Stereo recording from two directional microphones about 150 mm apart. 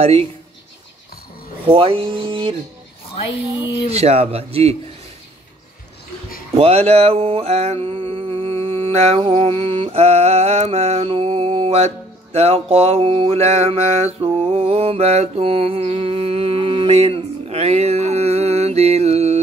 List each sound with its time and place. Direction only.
0.0 s a man's voice: 40° right (ahead or behind)
1.7 s a man's voice: 35° right (ahead or behind)
3.9 s a man's voice: 45° right (ahead or behind)
6.5 s mantra: 45° right (ahead or behind)